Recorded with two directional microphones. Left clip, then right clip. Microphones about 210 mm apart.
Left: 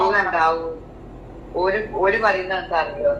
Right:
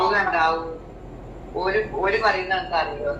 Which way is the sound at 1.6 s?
35° left (ahead or behind).